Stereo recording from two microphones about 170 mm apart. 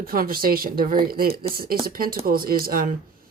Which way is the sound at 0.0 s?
60° right (ahead or behind).